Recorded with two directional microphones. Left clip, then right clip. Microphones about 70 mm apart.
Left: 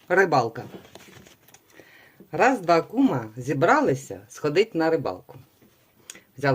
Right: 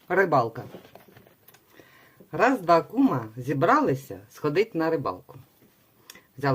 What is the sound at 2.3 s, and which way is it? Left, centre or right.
Speech, right.